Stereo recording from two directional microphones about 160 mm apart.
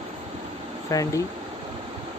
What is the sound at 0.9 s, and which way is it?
Speech, 20° left (ahead or behind).